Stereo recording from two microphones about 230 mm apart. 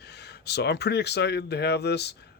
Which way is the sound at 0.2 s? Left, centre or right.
Left.